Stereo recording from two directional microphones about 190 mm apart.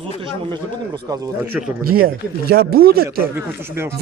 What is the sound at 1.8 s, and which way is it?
Speech, 50° right (ahead or behind).